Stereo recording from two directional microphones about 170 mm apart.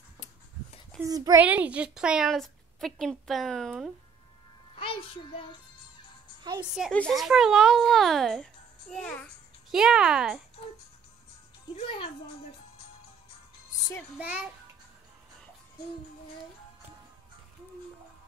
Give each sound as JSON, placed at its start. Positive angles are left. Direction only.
{"t": 1.0, "sound": "a child's voice", "side_deg": -20}
{"t": 1.4, "sound": "a woman's voice", "side_deg": -10}
{"t": 4.7, "sound": "music", "side_deg": 30}
{"t": 6.6, "sound": "a woman's voice", "side_deg": -5}
{"t": 9.7, "sound": "a woman's voice", "side_deg": -5}
{"t": 11.7, "sound": "a child's voice", "side_deg": 35}
{"t": 14.1, "sound": "a child's voice", "side_deg": -10}